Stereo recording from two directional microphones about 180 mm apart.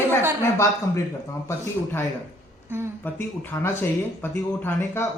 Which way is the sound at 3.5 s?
20° left (ahead or behind).